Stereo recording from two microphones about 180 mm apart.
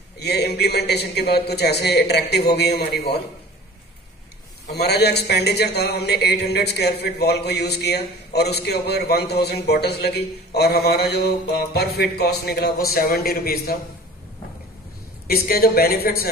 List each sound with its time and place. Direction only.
0.2 s a man's voice: 65° left (ahead or behind)
4.6 s a man's voice: 65° left (ahead or behind)
15.2 s a man's voice: 55° left (ahead or behind)